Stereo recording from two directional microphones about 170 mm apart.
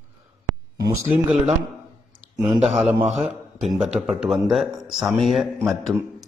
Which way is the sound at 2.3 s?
25° right (ahead or behind).